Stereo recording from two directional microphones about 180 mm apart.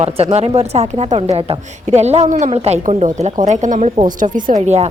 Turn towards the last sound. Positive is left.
turn(degrees=-40)  # may be behind; listen again after turning